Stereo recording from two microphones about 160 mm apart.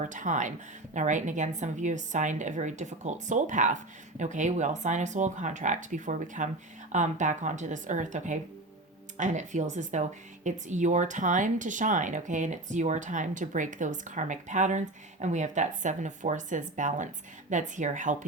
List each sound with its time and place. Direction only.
0.0 s speech: 55° right (ahead or behind)